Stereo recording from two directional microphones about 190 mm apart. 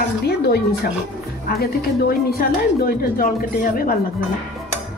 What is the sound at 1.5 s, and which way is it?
A woman's voice, 50° left (ahead or behind).